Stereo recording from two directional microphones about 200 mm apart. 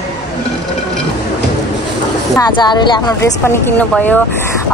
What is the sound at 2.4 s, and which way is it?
Speech, 20° left (ahead or behind).